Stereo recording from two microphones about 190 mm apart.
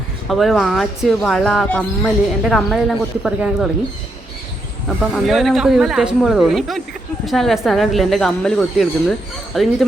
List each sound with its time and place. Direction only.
0.3 s speech: centre (ahead or behind)
4.9 s speech: centre (ahead or behind)